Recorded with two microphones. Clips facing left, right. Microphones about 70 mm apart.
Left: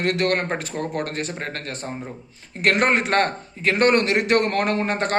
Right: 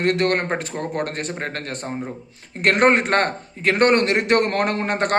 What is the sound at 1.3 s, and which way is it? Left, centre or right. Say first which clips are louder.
Speech: right 2 dB; right.